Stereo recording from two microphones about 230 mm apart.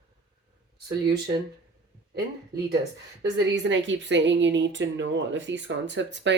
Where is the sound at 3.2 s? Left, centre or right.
Right.